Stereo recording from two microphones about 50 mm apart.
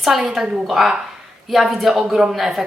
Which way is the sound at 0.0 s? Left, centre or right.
Centre.